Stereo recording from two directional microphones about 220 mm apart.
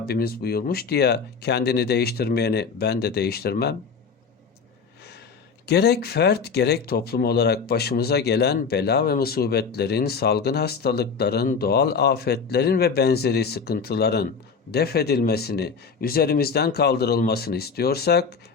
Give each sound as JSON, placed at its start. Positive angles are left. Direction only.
{"t": 0.0, "sound": "speech", "side_deg": 45}
{"t": 5.6, "sound": "speech", "side_deg": 50}